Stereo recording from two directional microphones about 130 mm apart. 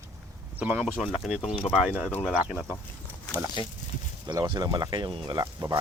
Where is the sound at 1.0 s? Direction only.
5° right (ahead or behind).